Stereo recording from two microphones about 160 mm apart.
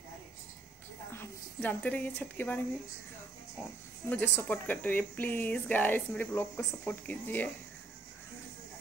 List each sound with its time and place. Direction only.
1.1 s speech: 10° left (ahead or behind)
4.1 s speech: 10° left (ahead or behind)